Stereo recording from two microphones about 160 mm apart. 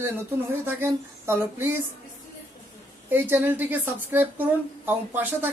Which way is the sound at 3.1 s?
15° right (ahead or behind).